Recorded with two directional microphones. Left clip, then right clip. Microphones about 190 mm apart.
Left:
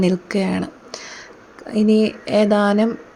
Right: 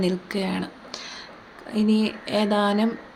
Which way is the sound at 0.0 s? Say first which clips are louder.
Left 6 dB; 35° left (ahead or behind).